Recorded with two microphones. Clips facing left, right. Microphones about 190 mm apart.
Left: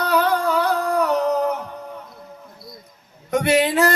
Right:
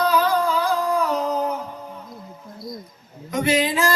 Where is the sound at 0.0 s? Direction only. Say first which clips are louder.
Even; 70° left (ahead or behind).